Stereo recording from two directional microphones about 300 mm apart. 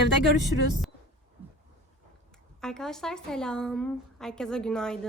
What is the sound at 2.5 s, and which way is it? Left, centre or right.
A woman's voice, centre.